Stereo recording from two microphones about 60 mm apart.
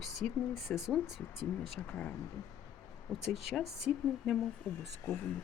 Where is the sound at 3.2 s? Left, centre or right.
Centre.